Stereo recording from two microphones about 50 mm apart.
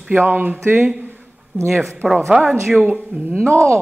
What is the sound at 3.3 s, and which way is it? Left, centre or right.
Speech, centre.